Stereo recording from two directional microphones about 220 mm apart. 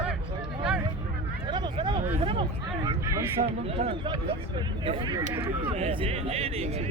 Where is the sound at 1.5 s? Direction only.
20° right (ahead or behind).